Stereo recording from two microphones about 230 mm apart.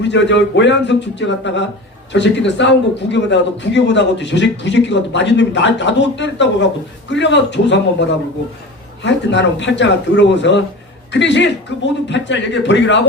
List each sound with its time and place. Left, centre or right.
0.0 s speech: left
9.0 s speech: left